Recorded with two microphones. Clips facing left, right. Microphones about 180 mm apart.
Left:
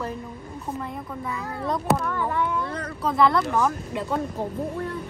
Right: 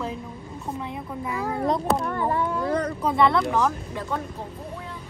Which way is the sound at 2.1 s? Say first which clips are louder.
Right 1 dB; 45° right (ahead or behind).